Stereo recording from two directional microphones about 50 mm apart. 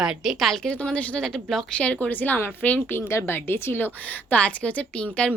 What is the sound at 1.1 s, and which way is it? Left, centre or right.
Speech, centre.